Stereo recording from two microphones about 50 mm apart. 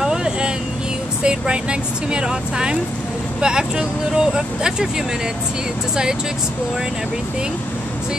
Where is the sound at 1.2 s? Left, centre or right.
Centre.